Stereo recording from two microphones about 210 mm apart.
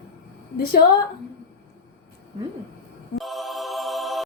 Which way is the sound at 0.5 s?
45° left (ahead or behind).